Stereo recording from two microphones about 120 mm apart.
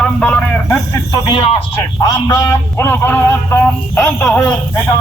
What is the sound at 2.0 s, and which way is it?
A man's voice, 30° left (ahead or behind).